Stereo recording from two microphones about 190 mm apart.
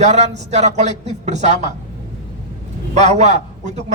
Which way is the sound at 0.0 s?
35° right (ahead or behind).